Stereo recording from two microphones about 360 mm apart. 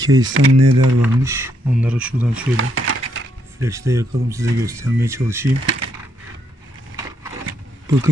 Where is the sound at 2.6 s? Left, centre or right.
Right.